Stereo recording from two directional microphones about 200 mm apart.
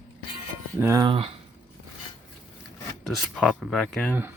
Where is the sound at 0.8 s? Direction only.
15° right (ahead or behind).